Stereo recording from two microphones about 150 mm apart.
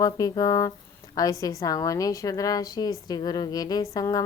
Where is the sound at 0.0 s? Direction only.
25° left (ahead or behind).